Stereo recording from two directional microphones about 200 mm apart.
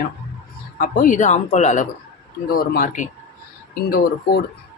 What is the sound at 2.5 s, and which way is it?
Speech, 50° left (ahead or behind).